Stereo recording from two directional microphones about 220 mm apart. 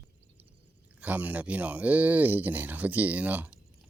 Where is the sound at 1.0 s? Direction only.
5° right (ahead or behind).